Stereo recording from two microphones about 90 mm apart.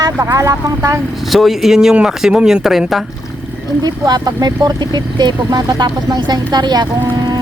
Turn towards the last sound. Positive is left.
turn(degrees=-45)  # may be behind; listen again after turning